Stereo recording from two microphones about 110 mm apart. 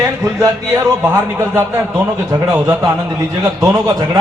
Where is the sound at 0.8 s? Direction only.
25° right (ahead or behind).